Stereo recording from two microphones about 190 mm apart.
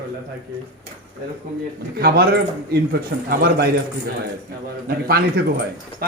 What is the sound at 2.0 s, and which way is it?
A man's voice, 55° right (ahead or behind).